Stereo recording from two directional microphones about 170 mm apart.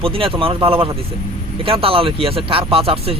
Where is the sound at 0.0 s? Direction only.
30° right (ahead or behind).